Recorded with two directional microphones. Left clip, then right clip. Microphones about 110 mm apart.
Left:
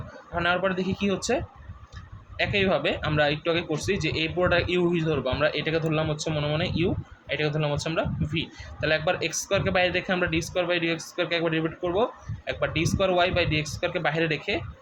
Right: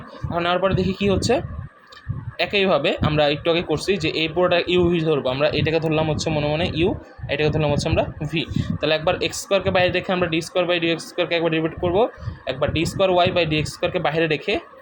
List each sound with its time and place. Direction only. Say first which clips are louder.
0.3 s a man's voice: right 4 dB; 45° right (ahead or behind)